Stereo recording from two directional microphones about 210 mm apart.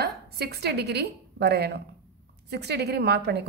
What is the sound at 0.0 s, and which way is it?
A woman's voice, 50° right (ahead or behind).